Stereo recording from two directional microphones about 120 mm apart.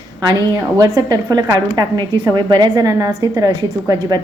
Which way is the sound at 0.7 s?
30° right (ahead or behind).